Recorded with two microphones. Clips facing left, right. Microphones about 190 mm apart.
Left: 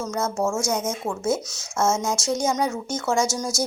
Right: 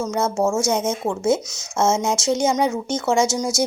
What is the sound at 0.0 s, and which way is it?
Speech, 20° right (ahead or behind).